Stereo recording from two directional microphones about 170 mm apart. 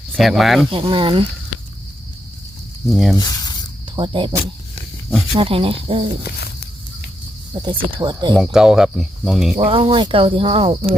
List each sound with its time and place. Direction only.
0.1 s speech: centre (ahead or behind)
0.7 s speech: 30° right (ahead or behind)
2.8 s speech: centre (ahead or behind)
3.2 s speech: 25° left (ahead or behind)
3.9 s speech: 30° right (ahead or behind)
7.6 s speech: 30° right (ahead or behind)
8.5 s speech: 5° right (ahead or behind)
9.6 s speech: 30° right (ahead or behind)